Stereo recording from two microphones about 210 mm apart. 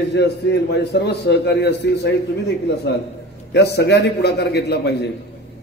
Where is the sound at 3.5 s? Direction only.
50° left (ahead or behind).